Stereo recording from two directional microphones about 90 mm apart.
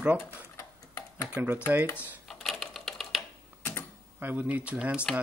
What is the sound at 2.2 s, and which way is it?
Typewriter, 5° left (ahead or behind).